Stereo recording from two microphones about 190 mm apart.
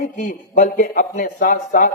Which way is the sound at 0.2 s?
40° left (ahead or behind).